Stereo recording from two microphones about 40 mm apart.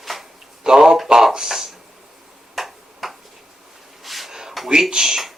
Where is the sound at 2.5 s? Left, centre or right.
Centre.